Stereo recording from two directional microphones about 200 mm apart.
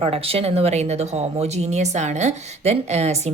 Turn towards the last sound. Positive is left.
turn(degrees=-35)  # may be behind; listen again after turning